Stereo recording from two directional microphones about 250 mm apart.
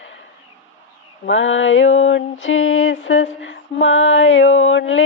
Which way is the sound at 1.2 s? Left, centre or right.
Left.